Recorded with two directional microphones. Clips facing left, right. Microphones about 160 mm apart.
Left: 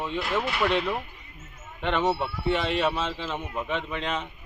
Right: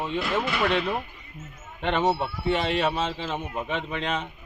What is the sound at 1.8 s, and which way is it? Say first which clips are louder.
A man's voice: right 1 dB; 30° right (ahead or behind).